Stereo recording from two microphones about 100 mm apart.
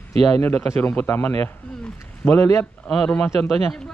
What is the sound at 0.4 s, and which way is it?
A man's voice, 15° left (ahead or behind).